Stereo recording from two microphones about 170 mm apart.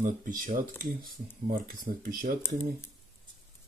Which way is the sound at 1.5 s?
55° right (ahead or behind).